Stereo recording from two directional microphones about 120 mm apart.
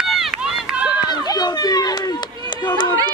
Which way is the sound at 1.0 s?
35° left (ahead or behind).